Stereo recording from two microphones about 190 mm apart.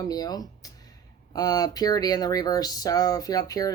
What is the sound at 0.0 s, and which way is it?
Speech, 20° left (ahead or behind).